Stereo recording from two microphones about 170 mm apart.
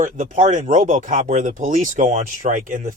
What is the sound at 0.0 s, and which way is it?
Speech, 50° right (ahead or behind).